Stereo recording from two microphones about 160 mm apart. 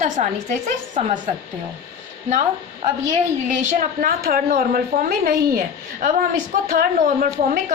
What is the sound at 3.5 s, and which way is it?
A woman's voice, 50° right (ahead or behind).